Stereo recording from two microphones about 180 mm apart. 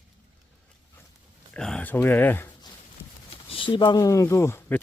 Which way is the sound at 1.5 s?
5° left (ahead or behind).